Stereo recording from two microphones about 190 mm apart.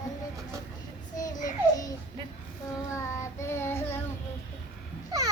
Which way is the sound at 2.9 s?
15° left (ahead or behind).